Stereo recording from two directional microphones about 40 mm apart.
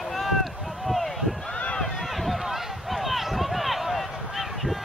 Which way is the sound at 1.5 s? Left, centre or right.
Left.